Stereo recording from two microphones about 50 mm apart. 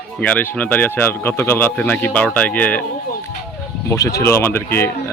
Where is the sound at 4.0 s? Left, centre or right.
Left.